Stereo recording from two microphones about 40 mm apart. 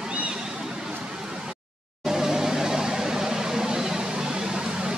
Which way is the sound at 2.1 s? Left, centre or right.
Centre.